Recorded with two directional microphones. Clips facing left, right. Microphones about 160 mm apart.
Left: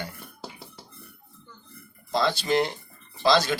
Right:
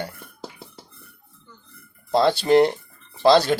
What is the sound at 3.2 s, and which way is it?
Speech, 30° right (ahead or behind).